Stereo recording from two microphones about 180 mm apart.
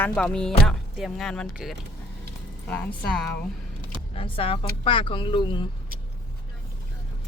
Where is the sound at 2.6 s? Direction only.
10° left (ahead or behind).